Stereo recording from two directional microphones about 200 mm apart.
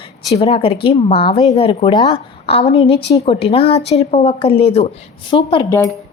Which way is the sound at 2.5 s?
30° left (ahead or behind).